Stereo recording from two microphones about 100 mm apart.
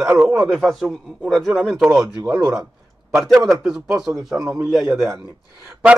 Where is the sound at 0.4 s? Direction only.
Centre (ahead or behind).